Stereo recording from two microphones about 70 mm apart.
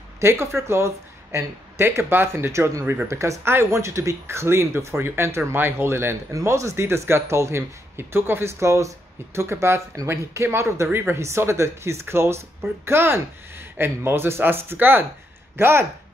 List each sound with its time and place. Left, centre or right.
0.2 s a man's voice: right